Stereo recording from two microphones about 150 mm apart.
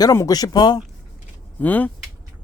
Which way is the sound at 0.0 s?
25° left (ahead or behind).